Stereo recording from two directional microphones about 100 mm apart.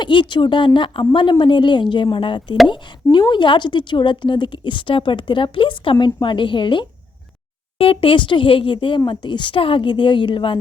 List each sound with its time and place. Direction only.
0.0 s a woman's voice: 50° left (ahead or behind)
7.8 s a woman's voice: 65° left (ahead or behind)